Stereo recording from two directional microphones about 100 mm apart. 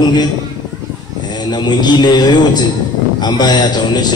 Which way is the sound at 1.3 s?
45° left (ahead or behind).